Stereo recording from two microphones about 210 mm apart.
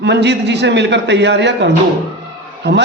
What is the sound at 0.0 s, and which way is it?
A man's voice, 55° right (ahead or behind).